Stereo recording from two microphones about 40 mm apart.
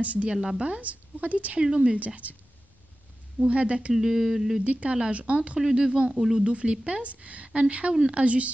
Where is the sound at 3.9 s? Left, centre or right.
Centre.